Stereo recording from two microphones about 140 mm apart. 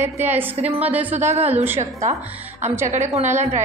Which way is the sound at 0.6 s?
50° right (ahead or behind).